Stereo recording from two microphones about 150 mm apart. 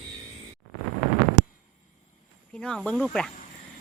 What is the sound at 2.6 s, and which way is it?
Speech, 5° left (ahead or behind).